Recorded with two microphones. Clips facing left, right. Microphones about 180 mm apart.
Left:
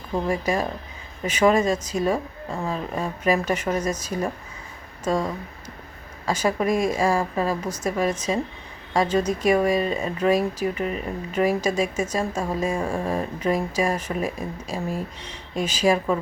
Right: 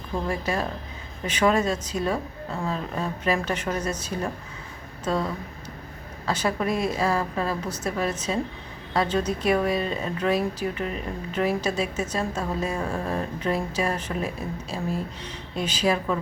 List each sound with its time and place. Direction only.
0.3 s speech: 10° left (ahead or behind)
6.7 s a woman's voice: 45° left (ahead or behind)
6.9 s speech: 10° left (ahead or behind)